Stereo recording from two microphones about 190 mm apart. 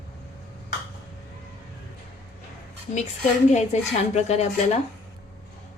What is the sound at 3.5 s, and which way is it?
Speech, 35° left (ahead or behind).